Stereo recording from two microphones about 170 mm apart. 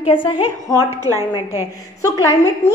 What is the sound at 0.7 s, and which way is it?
Speech, 20° right (ahead or behind).